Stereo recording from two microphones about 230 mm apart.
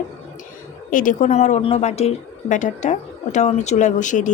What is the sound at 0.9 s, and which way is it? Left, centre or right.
A woman's voice, left.